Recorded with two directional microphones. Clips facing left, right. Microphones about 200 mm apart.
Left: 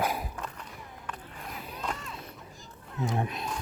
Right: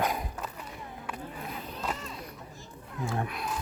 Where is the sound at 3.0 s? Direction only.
20° left (ahead or behind).